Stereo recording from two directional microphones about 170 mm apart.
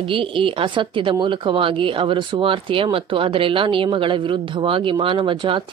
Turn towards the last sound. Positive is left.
turn(degrees=-30)  # may be behind; listen again after turning